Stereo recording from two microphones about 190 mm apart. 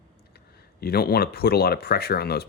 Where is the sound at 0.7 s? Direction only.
55° left (ahead or behind).